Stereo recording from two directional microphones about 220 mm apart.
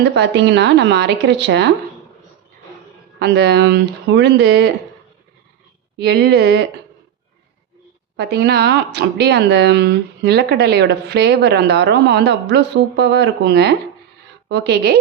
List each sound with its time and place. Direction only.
0.1 s speech: 50° right (ahead or behind)
3.2 s speech: 50° right (ahead or behind)
6.0 s speech: 45° right (ahead or behind)
8.1 s speech: 45° right (ahead or behind)